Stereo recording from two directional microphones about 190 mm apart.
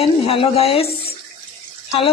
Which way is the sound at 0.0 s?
30° left (ahead or behind).